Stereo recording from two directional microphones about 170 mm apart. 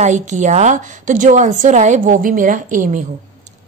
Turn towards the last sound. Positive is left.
turn(degrees=-50)  # may be behind; listen again after turning